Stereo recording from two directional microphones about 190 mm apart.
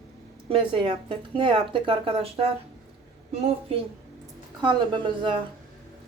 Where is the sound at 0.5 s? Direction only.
25° right (ahead or behind).